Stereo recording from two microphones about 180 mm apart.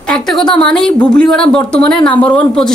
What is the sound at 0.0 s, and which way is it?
A woman's voice, 5° left (ahead or behind).